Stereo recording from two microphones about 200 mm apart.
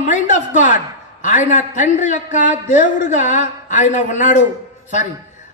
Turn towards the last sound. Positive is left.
turn(degrees=40)  # may be behind; listen again after turning